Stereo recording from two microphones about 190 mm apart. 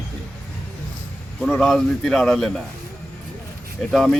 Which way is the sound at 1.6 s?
Centre (ahead or behind).